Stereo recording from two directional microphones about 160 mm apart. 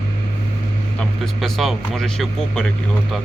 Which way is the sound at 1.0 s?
Centre (ahead or behind).